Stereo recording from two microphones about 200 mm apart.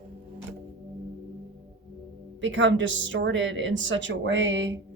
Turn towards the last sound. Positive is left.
turn(degrees=-65)  # may be behind; listen again after turning